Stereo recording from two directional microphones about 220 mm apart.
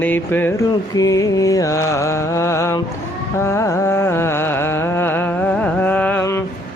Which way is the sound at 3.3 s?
10° left (ahead or behind).